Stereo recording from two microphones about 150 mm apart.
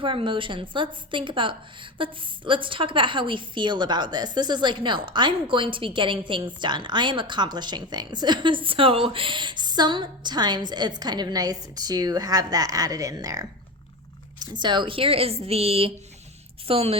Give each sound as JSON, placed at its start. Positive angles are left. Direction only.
{"t": 0.0, "sound": "a woman's voice", "side_deg": -35}